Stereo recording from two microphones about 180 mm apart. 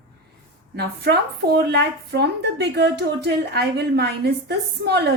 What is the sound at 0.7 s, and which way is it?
Speech, 65° right (ahead or behind).